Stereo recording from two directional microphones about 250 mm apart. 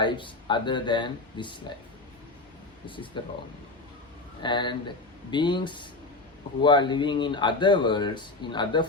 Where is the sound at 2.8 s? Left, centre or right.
Centre.